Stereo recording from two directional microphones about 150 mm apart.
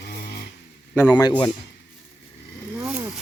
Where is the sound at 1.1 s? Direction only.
30° left (ahead or behind).